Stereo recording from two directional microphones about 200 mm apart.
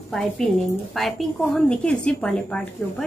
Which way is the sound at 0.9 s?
Centre (ahead or behind).